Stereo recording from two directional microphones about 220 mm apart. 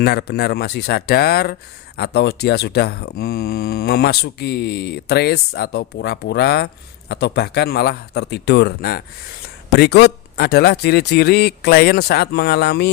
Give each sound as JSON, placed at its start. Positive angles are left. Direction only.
{"t": 0.0, "sound": "speech", "side_deg": 45}